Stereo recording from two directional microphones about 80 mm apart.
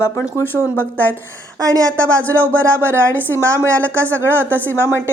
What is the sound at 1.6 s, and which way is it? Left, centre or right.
Speech, right.